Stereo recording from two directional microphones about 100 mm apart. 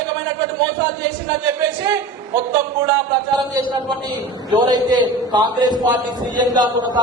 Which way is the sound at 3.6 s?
50° right (ahead or behind).